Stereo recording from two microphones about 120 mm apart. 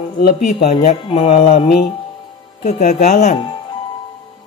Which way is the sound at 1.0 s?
50° left (ahead or behind).